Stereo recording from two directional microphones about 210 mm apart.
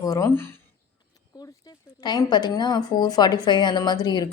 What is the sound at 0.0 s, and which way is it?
Speech, 15° left (ahead or behind).